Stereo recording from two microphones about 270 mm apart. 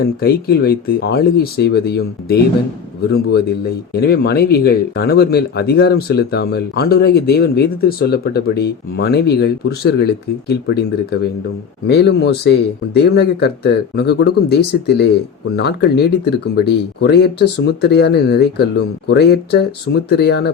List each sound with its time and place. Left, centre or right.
0.2 s speech: left
4.0 s speech: left